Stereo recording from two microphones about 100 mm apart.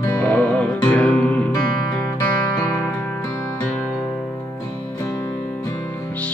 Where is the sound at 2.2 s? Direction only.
25° left (ahead or behind).